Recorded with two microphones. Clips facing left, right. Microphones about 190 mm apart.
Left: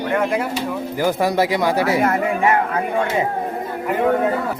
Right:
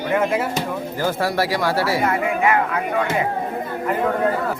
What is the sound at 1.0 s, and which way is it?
Speech, 15° left (ahead or behind).